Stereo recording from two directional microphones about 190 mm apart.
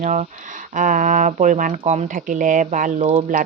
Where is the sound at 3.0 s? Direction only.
30° right (ahead or behind).